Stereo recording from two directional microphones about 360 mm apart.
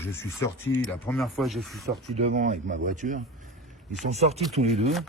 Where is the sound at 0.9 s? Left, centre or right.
Centre.